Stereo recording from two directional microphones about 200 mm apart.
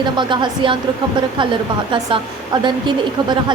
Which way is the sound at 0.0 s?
25° right (ahead or behind).